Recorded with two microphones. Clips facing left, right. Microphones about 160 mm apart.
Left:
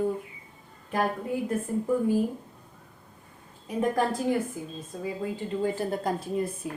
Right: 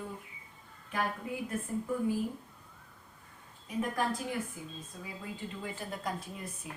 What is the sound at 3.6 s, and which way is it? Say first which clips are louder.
Speech: left 7 dB; 35° left (ahead or behind).